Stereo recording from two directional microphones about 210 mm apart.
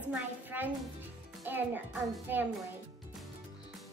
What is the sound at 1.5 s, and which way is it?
Speech, 10° right (ahead or behind).